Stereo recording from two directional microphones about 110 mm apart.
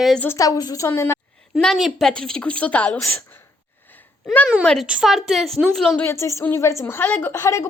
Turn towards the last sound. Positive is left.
turn(degrees=25)  # may be behind; listen again after turning